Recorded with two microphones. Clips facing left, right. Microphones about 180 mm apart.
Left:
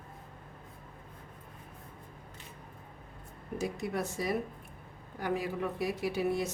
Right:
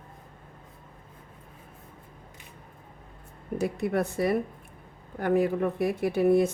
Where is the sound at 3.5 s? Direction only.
60° right (ahead or behind).